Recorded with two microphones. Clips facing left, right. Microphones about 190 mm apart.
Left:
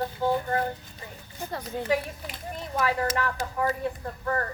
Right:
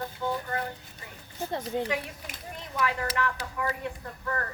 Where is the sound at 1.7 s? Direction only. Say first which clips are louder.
Right 3 dB; 20° right (ahead or behind).